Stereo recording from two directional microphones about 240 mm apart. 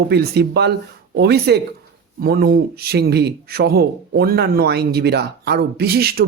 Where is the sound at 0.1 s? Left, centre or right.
Right.